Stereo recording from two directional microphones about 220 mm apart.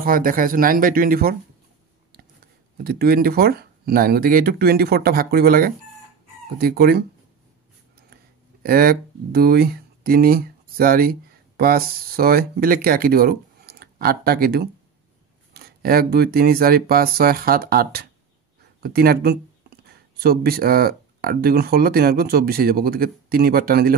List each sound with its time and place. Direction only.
0.0 s speech: 40° right (ahead or behind)
8.6 s speech: 40° right (ahead or behind)